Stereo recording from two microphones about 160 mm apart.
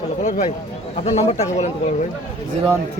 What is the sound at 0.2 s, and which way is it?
A man's voice, 50° left (ahead or behind).